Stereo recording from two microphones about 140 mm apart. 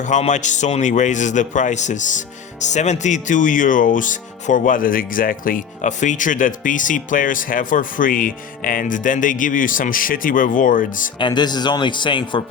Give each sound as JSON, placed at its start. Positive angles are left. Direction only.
{"t": 0.0, "sound": "speech", "side_deg": 60}
{"t": 11.2, "sound": "speech", "side_deg": 35}